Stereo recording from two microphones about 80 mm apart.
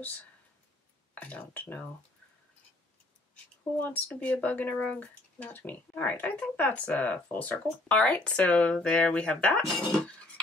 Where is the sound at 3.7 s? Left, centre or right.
Centre.